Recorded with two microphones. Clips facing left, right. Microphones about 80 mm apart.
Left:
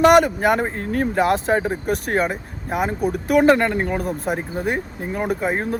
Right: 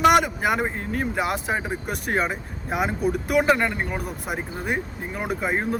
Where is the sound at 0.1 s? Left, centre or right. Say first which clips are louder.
Left 5 dB; left.